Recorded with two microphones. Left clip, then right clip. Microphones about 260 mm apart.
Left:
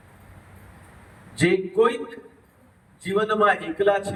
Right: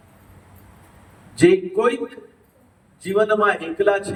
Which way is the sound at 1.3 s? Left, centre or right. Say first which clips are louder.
Right 5 dB; centre.